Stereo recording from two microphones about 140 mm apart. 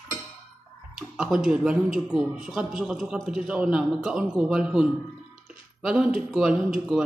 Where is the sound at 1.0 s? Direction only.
5° right (ahead or behind).